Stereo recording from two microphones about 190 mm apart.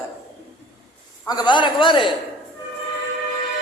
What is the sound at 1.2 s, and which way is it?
Speech, 20° left (ahead or behind).